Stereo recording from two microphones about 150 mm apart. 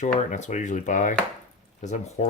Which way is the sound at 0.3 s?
50° left (ahead or behind).